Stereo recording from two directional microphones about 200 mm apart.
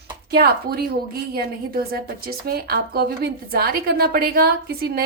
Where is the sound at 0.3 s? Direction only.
50° right (ahead or behind).